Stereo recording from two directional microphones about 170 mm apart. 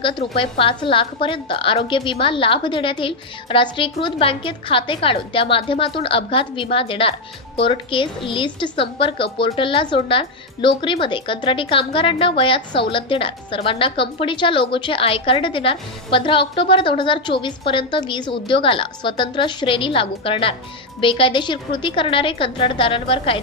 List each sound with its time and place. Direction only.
0.0 s a woman's voice: 30° left (ahead or behind)